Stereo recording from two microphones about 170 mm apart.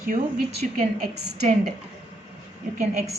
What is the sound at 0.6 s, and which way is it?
Speech, 45° right (ahead or behind).